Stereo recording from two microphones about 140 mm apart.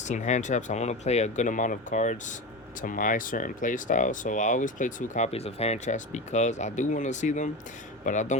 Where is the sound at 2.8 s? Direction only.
75° left (ahead or behind).